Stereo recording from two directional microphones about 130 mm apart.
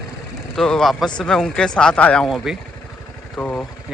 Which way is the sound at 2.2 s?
5° right (ahead or behind).